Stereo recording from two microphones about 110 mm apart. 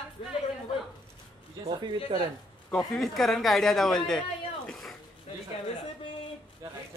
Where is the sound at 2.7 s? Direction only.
Centre (ahead or behind).